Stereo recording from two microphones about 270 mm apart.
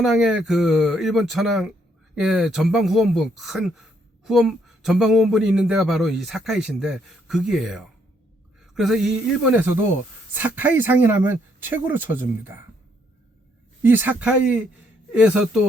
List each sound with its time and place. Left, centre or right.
0.0 s speech: centre
13.8 s speech: centre